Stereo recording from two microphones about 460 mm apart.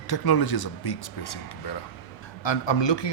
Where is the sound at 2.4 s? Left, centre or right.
Left.